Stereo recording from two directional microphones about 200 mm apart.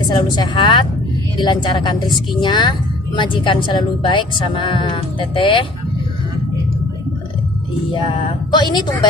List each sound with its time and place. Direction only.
0.1 s a woman's voice: 20° left (ahead or behind)
7.9 s a woman's voice: 25° left (ahead or behind)